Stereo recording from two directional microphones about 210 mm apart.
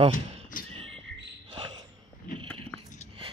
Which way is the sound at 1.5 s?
25° right (ahead or behind).